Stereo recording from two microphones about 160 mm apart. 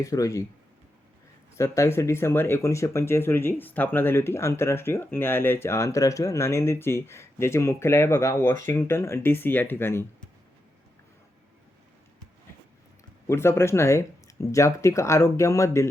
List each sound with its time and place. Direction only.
0.0 s speech: 20° left (ahead or behind)
1.5 s speech: 20° left (ahead or behind)
13.2 s speech: 15° left (ahead or behind)